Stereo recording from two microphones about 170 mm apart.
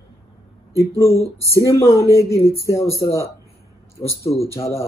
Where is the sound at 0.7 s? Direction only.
15° left (ahead or behind).